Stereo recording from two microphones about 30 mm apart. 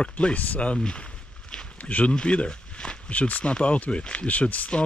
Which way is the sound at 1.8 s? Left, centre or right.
Left.